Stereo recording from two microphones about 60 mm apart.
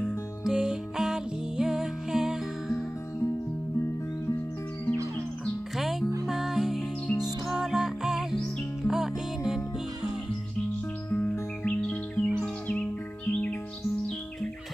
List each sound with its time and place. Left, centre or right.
0.0 s music: centre
5.8 s music: centre
11.1 s music: left